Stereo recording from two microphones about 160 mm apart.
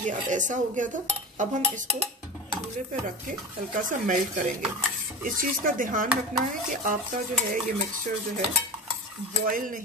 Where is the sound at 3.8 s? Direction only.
55° right (ahead or behind).